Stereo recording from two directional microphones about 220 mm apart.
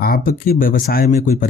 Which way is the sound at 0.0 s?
40° left (ahead or behind).